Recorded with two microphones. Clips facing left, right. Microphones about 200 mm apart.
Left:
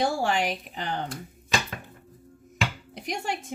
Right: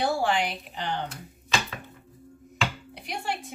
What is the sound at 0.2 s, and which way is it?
Speech, 45° left (ahead or behind).